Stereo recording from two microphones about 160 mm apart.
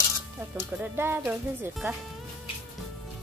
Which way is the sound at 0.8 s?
15° right (ahead or behind).